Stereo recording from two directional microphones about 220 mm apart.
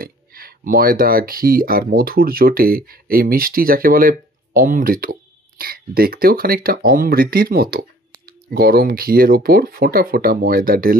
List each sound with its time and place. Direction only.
0.0 s speech: 40° right (ahead or behind)